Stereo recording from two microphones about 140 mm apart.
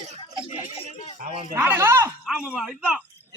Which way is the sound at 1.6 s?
15° right (ahead or behind).